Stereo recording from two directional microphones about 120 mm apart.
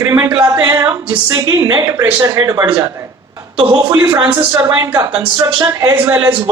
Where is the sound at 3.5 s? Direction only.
45° right (ahead or behind).